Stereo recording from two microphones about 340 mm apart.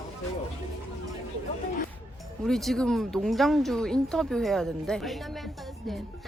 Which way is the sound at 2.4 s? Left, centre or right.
Centre.